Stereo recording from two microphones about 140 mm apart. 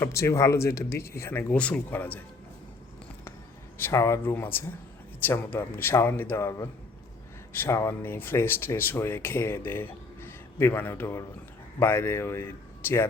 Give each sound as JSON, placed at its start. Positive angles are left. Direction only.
{"t": 0.0, "sound": "speech", "side_deg": 20}
{"t": 3.8, "sound": "speech", "side_deg": 20}